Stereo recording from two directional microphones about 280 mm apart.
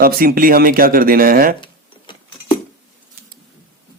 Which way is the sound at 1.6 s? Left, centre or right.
Centre.